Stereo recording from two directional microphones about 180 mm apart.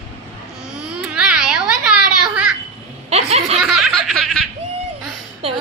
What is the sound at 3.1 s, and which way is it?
Speech, 35° right (ahead or behind).